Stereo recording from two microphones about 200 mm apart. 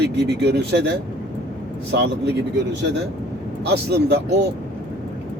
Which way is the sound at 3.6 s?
55° right (ahead or behind).